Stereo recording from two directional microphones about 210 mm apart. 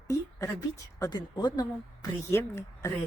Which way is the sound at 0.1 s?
15° left (ahead or behind).